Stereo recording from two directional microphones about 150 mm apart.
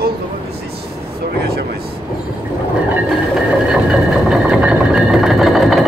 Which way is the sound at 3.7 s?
5° right (ahead or behind).